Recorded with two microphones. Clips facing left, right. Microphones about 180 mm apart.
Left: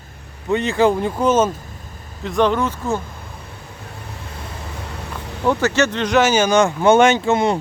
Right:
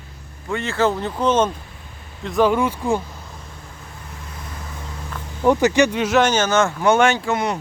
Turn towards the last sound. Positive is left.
turn(degrees=25)  # may be behind; listen again after turning